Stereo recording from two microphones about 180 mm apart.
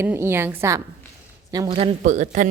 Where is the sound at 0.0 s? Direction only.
15° right (ahead or behind).